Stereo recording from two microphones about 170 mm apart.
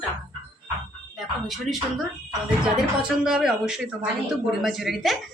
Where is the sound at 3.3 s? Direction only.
5° right (ahead or behind).